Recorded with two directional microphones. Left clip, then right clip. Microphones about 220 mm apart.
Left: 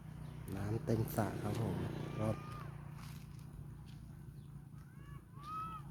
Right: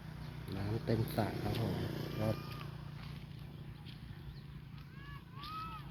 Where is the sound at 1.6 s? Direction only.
40° right (ahead or behind).